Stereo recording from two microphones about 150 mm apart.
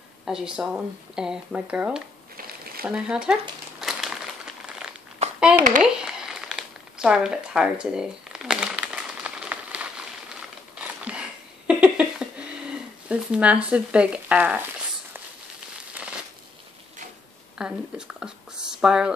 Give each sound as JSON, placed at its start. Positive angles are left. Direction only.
{"t": 0.2, "sound": "speech", "side_deg": -5}
{"t": 3.8, "sound": "crumpling", "side_deg": -5}
{"t": 5.2, "sound": "clapping", "side_deg": -50}
{"t": 5.8, "sound": "crumpling", "side_deg": -5}
{"t": 10.8, "sound": "a sound", "side_deg": -10}
{"t": 17.6, "sound": "speech", "side_deg": -5}